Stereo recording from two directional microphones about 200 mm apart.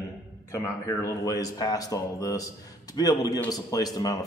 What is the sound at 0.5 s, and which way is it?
A man's voice, 15° left (ahead or behind).